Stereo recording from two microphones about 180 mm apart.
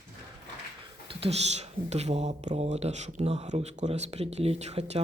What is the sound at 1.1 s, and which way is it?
Speech, 35° right (ahead or behind).